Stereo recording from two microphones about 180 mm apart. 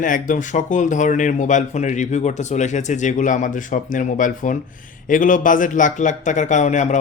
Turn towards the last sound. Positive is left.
turn(degrees=40)  # may be behind; listen again after turning